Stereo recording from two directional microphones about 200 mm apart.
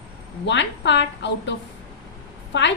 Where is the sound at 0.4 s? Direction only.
60° left (ahead or behind).